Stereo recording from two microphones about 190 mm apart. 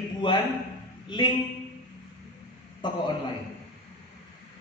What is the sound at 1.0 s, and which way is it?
Speech, 25° left (ahead or behind).